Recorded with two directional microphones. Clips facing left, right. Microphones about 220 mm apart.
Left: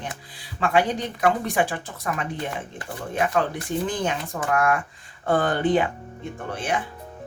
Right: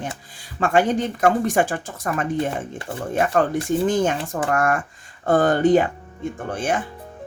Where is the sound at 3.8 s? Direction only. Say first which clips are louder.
Right 6 dB; 45° right (ahead or behind).